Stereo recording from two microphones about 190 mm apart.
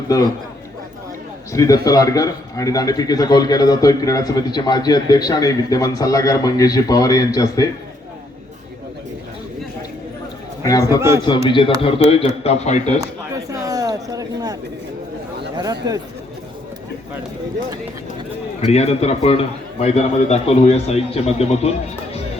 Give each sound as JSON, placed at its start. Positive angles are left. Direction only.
{"t": 1.5, "sound": "a man's voice", "side_deg": 20}
{"t": 10.6, "sound": "a man's voice", "side_deg": 20}
{"t": 13.0, "sound": "a sound", "side_deg": -15}
{"t": 15.5, "sound": "speech", "side_deg": -20}
{"t": 18.6, "sound": "a man's voice", "side_deg": 35}